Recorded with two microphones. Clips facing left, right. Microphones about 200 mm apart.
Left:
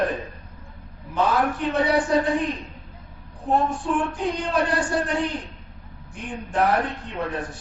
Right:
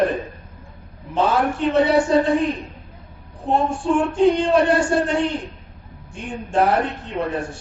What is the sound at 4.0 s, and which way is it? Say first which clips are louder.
A man's voice: right 9 dB; 25° right (ahead or behind).